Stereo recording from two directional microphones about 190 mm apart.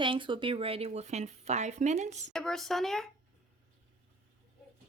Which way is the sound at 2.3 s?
5° left (ahead or behind).